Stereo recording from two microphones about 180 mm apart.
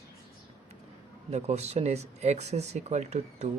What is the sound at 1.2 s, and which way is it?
Speech, 35° right (ahead or behind).